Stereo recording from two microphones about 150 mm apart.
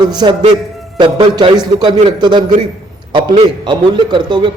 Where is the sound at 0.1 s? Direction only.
30° right (ahead or behind).